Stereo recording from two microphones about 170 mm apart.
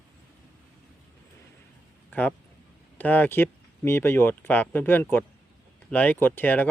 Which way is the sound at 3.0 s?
10° left (ahead or behind).